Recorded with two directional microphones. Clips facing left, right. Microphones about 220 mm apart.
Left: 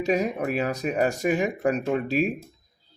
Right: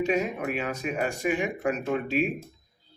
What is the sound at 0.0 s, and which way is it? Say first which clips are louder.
Speech: left 2 dB; 35° left (ahead or behind).